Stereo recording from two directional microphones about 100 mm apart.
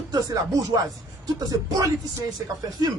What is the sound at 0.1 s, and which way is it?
Speech, 40° right (ahead or behind).